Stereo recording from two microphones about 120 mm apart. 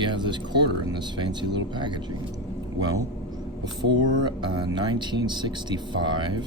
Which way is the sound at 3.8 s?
40° right (ahead or behind).